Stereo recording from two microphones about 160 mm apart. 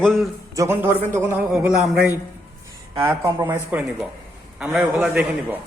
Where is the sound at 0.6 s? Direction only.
15° right (ahead or behind).